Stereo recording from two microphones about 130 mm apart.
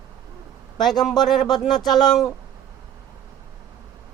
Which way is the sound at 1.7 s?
30° left (ahead or behind).